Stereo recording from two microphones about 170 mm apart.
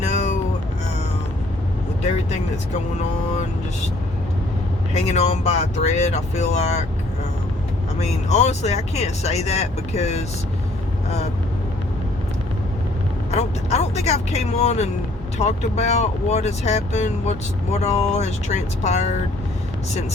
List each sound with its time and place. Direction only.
0.1 s music: 45° left (ahead or behind)
4.9 s speech: 40° left (ahead or behind)
7.9 s speech: 40° left (ahead or behind)
13.3 s speech: 40° left (ahead or behind)